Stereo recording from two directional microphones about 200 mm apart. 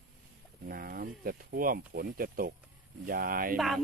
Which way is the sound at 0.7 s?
50° right (ahead or behind).